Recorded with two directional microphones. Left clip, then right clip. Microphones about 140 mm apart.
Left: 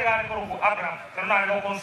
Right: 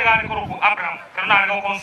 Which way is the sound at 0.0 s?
35° right (ahead or behind).